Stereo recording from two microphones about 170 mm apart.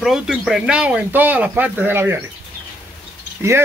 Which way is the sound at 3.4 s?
15° right (ahead or behind).